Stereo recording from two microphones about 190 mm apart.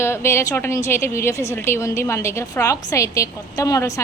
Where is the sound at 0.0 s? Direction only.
15° left (ahead or behind).